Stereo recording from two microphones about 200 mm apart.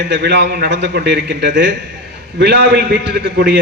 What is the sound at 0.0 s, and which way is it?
A man's voice, 60° right (ahead or behind).